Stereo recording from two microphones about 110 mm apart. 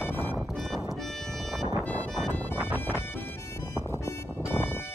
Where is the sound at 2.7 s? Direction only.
20° left (ahead or behind).